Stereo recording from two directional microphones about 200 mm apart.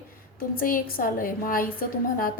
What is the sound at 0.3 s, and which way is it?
A woman's voice, 45° left (ahead or behind).